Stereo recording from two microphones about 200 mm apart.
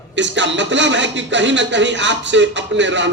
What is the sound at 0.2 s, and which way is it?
Speech, 65° right (ahead or behind).